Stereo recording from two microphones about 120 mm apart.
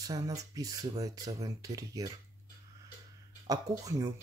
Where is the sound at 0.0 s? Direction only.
30° right (ahead or behind).